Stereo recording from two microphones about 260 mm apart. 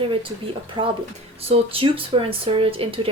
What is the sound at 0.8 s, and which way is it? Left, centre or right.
A woman's voice, centre.